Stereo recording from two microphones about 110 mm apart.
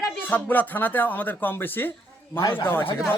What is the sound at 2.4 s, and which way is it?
Speech, 40° left (ahead or behind).